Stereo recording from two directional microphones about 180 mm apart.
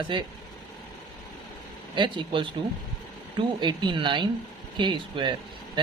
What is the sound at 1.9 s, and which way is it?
Speech, 25° right (ahead or behind).